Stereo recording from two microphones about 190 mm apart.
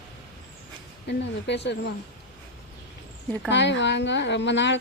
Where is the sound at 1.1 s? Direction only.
65° left (ahead or behind).